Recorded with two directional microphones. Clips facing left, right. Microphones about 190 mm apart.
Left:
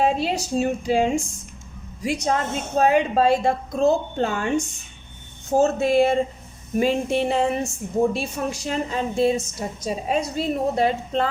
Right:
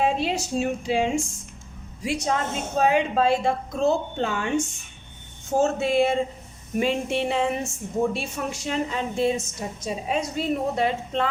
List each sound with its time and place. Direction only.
0.0 s a woman's voice: 40° left (ahead or behind)